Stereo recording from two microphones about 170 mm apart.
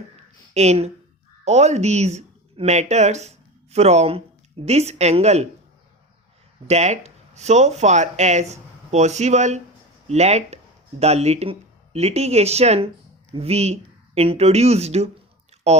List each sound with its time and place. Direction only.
0.5 s speech: 40° right (ahead or behind)
6.7 s speech: 40° right (ahead or behind)